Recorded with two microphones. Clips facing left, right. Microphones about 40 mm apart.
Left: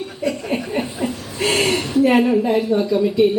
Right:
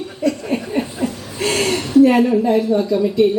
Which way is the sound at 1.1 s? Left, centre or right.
Centre.